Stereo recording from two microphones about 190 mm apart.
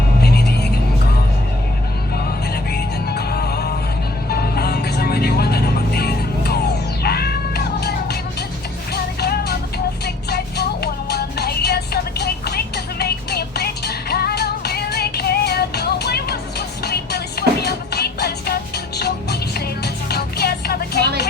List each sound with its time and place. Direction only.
0.2 s music: 55° left (ahead or behind)
2.6 s music: 55° left (ahead or behind)